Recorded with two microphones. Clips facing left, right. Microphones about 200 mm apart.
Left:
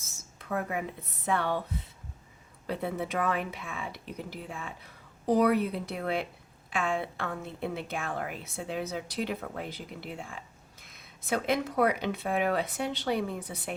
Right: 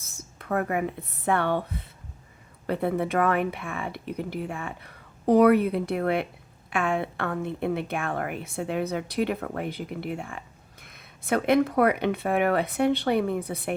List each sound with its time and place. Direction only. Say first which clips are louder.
0.2 s speech: right 6 dB; 60° right (ahead or behind)
2.6 s a woman's voice: right 7 dB; 60° right (ahead or behind)